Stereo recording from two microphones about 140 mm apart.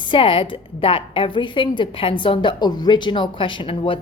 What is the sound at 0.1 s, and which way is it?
A woman's voice, 40° left (ahead or behind).